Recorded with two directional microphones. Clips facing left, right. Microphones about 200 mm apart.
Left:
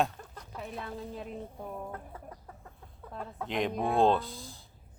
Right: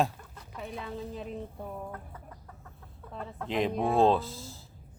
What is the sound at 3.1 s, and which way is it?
Speech, centre (ahead or behind).